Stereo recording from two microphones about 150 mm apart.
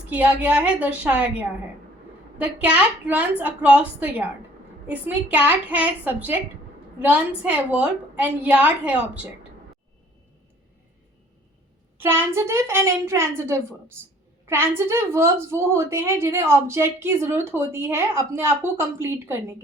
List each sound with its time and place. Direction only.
0.1 s speech: 10° right (ahead or behind)
2.4 s speech: 10° right (ahead or behind)
11.9 s a woman's voice: 15° right (ahead or behind)